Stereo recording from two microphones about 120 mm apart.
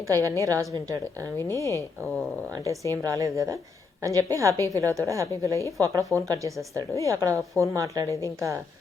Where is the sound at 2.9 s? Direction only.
30° right (ahead or behind).